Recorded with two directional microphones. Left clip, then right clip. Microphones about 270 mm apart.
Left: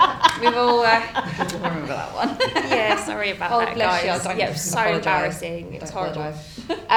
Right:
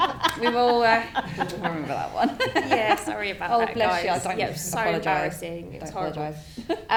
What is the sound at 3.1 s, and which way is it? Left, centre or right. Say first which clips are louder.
Speech: left 4 dB; centre.